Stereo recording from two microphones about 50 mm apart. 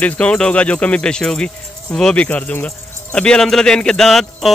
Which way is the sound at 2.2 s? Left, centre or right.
Left.